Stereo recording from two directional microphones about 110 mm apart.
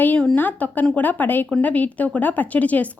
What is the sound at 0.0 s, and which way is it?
Speech, 15° left (ahead or behind).